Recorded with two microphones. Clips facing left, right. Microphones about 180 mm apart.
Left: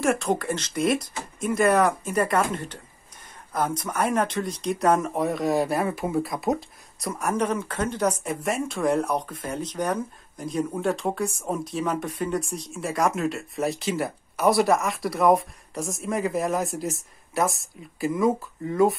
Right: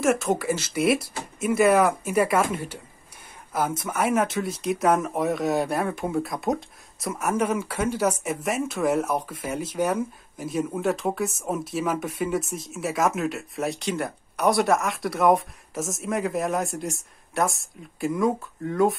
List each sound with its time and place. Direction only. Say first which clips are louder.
0.0 s speech: right 1 dB; centre (ahead or behind)